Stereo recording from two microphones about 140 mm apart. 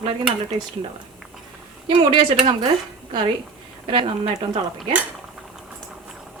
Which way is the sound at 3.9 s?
35° right (ahead or behind).